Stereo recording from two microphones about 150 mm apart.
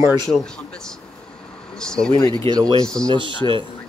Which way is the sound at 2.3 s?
30° right (ahead or behind).